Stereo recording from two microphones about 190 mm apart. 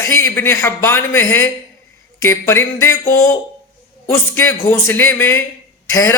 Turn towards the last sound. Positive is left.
turn(degrees=15)  # may be behind; listen again after turning